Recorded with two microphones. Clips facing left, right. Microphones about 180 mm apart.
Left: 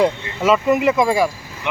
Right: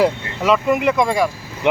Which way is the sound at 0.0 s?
Centre (ahead or behind).